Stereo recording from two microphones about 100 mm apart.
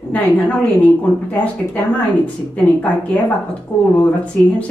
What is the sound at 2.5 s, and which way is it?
Speech, 15° left (ahead or behind).